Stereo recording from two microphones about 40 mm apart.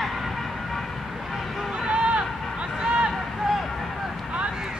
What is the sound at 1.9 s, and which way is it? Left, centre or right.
Run, right.